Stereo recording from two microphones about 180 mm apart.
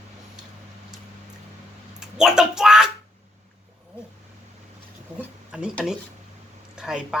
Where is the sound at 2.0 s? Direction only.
5° right (ahead or behind).